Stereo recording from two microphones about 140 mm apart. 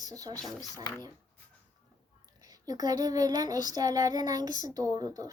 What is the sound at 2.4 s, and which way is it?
Child singing, 25° right (ahead or behind).